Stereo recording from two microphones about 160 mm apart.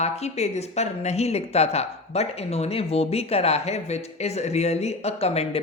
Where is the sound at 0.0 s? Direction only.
45° left (ahead or behind).